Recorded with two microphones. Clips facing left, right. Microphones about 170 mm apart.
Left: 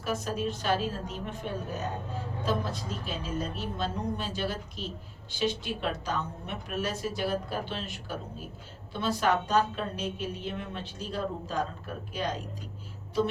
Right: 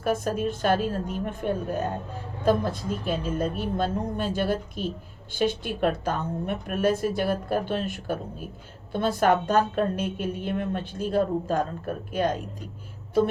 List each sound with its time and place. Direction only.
0.0 s a woman's voice: 50° right (ahead or behind)